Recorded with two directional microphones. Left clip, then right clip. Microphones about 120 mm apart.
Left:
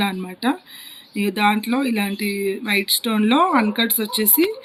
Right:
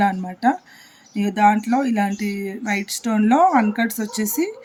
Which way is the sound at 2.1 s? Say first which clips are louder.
Left 4 dB; 45° right (ahead or behind).